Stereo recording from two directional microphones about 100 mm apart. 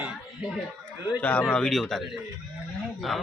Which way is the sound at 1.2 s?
15° left (ahead or behind).